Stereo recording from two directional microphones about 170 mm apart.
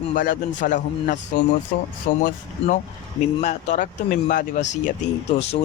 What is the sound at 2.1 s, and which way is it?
Speech, 60° left (ahead or behind).